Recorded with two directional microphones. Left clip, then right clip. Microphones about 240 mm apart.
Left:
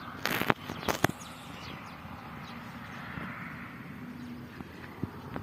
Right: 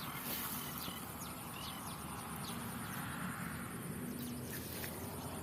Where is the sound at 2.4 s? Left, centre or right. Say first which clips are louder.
Left 2 dB; right.